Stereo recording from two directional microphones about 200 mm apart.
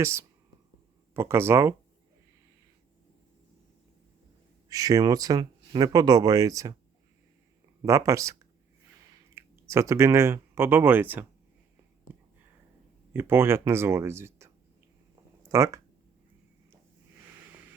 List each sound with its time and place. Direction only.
0.0 s speech: 15° right (ahead or behind)
4.7 s speech: 20° right (ahead or behind)
7.8 s speech: 15° right (ahead or behind)
13.1 s speech: 10° right (ahead or behind)